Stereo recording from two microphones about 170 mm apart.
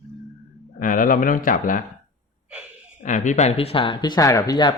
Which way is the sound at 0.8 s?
50° left (ahead or behind).